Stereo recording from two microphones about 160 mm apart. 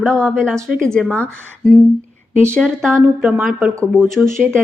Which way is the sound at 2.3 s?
15° right (ahead or behind).